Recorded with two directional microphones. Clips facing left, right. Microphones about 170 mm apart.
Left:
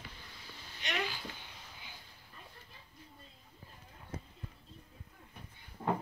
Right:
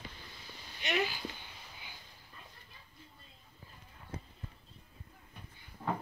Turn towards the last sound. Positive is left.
turn(degrees=20)  # may be behind; listen again after turning